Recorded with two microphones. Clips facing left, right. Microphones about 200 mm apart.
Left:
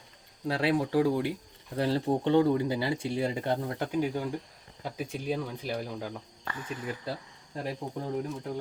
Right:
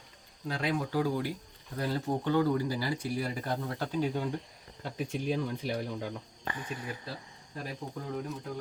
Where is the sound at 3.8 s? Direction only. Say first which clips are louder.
Left 2 dB; 10° left (ahead or behind).